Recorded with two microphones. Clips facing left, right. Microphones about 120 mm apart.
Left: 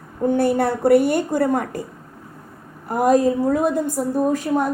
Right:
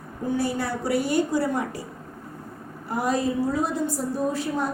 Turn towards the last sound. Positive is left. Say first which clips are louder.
# left 6 dB
turn(degrees=45)  # may be behind; listen again after turning